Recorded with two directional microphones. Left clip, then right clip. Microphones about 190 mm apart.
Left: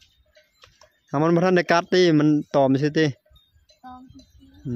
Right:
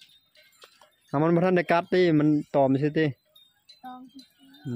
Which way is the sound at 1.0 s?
20° left (ahead or behind).